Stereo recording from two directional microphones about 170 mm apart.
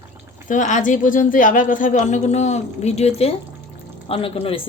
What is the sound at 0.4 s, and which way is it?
A woman's voice, 50° left (ahead or behind).